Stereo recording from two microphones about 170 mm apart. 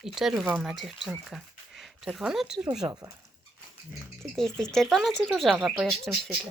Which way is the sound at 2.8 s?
15° right (ahead or behind).